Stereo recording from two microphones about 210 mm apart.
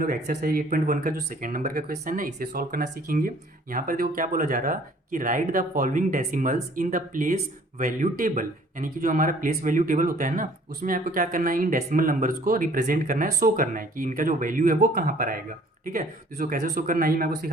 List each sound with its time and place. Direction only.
0.0 s speech: 45° right (ahead or behind)